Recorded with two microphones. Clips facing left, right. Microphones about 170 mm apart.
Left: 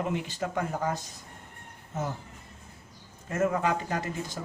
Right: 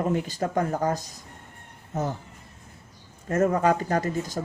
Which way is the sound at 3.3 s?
40° right (ahead or behind).